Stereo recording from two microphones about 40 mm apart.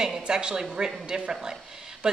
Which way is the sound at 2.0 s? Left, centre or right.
Centre.